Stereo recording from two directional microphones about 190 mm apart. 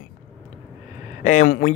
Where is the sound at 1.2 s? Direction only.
40° left (ahead or behind).